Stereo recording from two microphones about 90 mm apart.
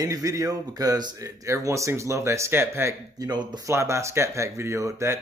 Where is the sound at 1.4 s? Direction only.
35° right (ahead or behind).